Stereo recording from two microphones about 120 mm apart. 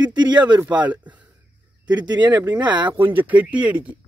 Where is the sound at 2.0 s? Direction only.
35° right (ahead or behind).